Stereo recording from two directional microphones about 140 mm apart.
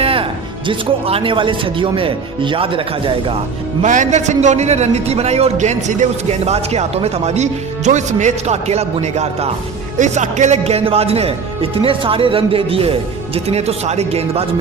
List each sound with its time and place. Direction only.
0.0 s music: 40° right (ahead or behind)
0.7 s speech: 40° right (ahead or behind)
3.8 s a man's voice: 65° right (ahead or behind); by 14.4 s 45° right (ahead or behind)